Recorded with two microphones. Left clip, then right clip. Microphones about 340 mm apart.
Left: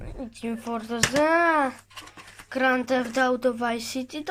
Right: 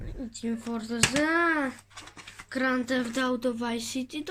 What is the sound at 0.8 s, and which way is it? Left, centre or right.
Speech, centre.